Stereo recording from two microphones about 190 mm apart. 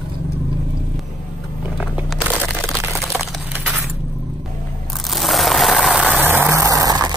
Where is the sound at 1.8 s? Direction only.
5° right (ahead or behind).